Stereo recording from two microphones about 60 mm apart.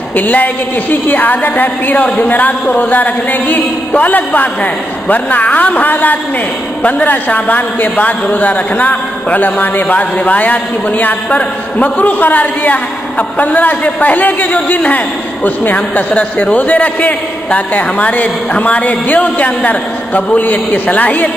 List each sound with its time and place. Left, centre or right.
0.1 s a woman's voice: left